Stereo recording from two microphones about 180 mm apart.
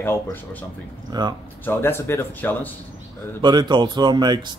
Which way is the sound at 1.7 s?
15° left (ahead or behind).